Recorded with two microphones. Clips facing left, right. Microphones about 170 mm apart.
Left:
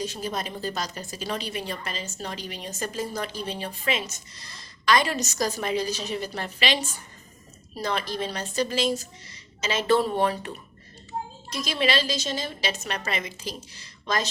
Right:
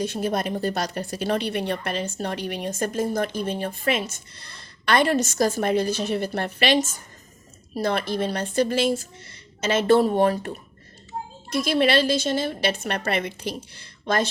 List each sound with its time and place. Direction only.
0.0 s a woman's voice: 60° right (ahead or behind)
11.5 s a woman's voice: 55° right (ahead or behind)